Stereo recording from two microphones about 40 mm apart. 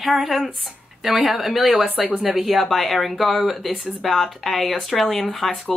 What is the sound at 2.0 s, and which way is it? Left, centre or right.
Speech, right.